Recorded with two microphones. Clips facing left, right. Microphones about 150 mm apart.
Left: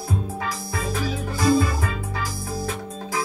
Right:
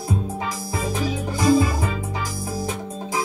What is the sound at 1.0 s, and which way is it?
Music, 20° right (ahead or behind).